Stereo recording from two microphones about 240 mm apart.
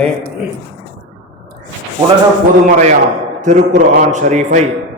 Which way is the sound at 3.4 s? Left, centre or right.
Right.